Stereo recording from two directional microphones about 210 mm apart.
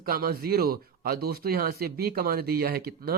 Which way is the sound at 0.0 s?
45° right (ahead or behind).